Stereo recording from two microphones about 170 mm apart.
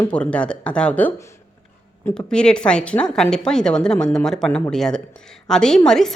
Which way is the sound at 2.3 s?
5° left (ahead or behind).